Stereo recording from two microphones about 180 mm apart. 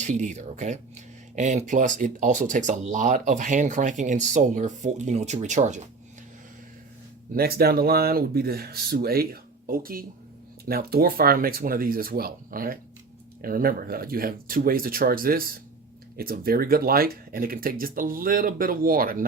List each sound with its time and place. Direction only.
0.0 s speech: 40° right (ahead or behind)
7.3 s speech: 60° right (ahead or behind)